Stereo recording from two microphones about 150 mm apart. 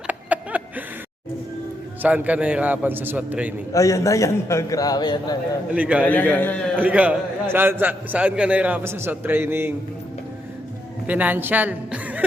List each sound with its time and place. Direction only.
0.1 s a sound: 10° right (ahead or behind)
2.0 s a man's voice: 10° right (ahead or behind)
3.7 s a man's voice: 20° left (ahead or behind)
5.7 s a man's voice: 10° right (ahead or behind)
6.1 s a man's voice: 10° left (ahead or behind)
6.7 s a man's voice: 10° right (ahead or behind)
11.0 s a woman's voice: 10° right (ahead or behind)